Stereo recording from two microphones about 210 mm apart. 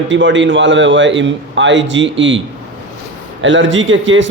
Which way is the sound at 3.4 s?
65° right (ahead or behind).